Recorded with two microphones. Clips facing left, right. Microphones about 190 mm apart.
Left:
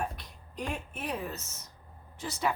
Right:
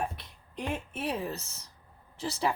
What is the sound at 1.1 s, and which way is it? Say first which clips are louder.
Speech: right 2 dB; 35° right (ahead or behind).